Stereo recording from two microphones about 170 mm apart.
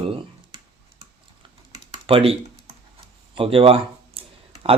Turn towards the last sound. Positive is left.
turn(degrees=-35)  # may be behind; listen again after turning